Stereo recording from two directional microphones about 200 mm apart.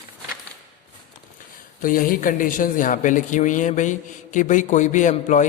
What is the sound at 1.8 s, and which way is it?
A man's voice, 45° left (ahead or behind).